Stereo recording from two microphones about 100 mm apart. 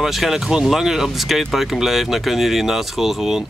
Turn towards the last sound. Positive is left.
turn(degrees=-5)  # may be behind; listen again after turning